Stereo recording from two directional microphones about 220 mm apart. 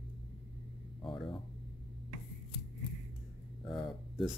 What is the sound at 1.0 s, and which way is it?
Speech, 20° left (ahead or behind).